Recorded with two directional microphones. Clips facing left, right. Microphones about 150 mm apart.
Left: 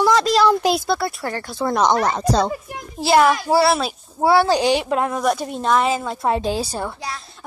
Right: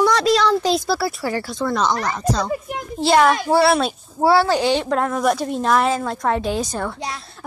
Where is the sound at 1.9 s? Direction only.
25° left (ahead or behind).